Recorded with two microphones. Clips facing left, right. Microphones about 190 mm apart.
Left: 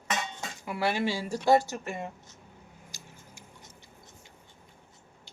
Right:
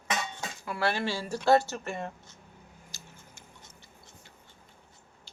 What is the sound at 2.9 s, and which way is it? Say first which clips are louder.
Tick-tock: left 1 dB; 15° left (ahead or behind).